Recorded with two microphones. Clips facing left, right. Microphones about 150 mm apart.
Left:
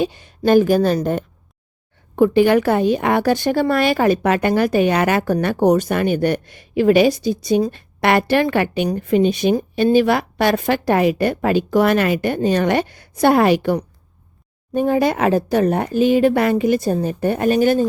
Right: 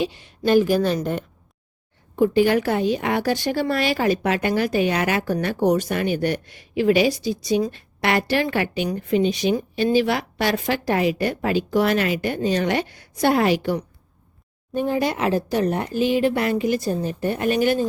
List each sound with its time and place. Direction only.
0.0 s a woman's voice: 45° left (ahead or behind)
2.1 s a woman's voice: 60° left (ahead or behind); by 17.8 s 45° left (ahead or behind)